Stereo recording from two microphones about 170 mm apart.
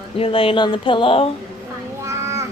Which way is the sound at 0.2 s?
30° left (ahead or behind).